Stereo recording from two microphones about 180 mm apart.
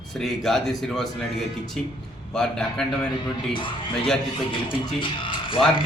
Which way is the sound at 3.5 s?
30° left (ahead or behind).